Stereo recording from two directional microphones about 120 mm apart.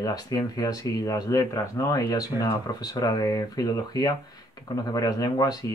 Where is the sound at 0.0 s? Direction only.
30° left (ahead or behind).